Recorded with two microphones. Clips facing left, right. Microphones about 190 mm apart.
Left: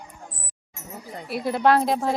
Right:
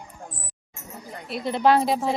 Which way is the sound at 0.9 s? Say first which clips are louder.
Left 2 dB; 5° left (ahead or behind).